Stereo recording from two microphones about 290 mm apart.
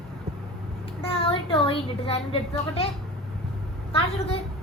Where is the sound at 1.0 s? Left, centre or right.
Centre.